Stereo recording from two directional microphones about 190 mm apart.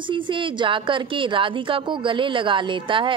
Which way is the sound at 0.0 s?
25° right (ahead or behind).